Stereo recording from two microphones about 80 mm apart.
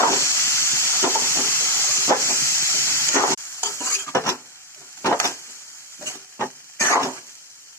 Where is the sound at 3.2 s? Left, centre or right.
Left.